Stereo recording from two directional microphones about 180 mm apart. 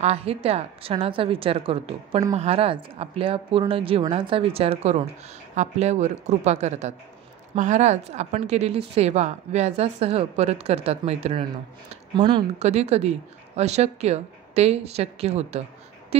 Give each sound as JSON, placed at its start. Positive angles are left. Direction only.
{"t": 0.0, "sound": "a woman's voice", "side_deg": -35}
{"t": 12.2, "sound": "speech", "side_deg": -25}
{"t": 12.5, "sound": "a woman's voice", "side_deg": -35}